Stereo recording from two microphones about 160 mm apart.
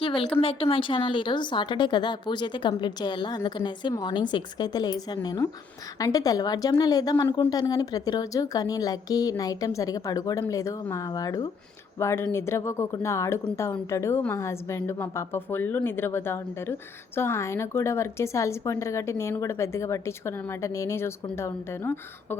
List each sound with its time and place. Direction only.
0.0 s speech: 35° left (ahead or behind); by 22.4 s 15° left (ahead or behind)